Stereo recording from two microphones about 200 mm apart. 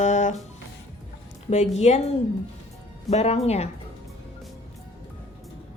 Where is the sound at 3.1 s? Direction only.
30° left (ahead or behind).